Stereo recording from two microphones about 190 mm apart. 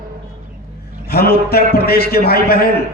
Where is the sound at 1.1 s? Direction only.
55° left (ahead or behind).